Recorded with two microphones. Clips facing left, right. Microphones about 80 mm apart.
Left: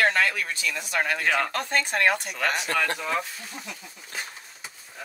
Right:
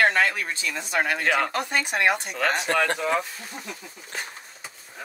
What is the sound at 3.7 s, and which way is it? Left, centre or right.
Speech, right.